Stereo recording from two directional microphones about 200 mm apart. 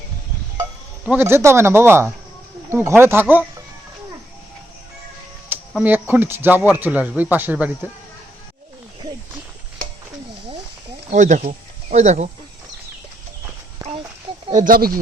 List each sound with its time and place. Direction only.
1.0 s speech: 10° right (ahead or behind)
5.8 s speech: 10° right (ahead or behind)
11.1 s speech: 40° right (ahead or behind)
14.4 s speech: 40° right (ahead or behind)